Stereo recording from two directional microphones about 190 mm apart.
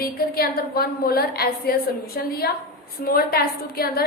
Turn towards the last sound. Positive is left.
turn(degrees=55)  # may be behind; listen again after turning